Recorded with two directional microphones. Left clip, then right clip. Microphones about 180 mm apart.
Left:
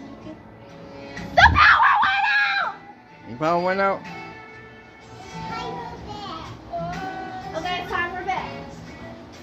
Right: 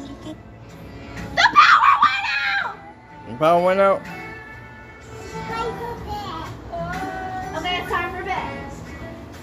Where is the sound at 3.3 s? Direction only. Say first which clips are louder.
Right 5 dB; 10° left (ahead or behind).